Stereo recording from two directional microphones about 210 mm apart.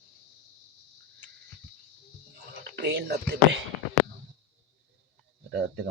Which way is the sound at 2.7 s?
55° right (ahead or behind).